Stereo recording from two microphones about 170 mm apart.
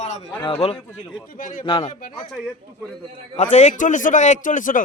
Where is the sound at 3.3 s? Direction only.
45° left (ahead or behind).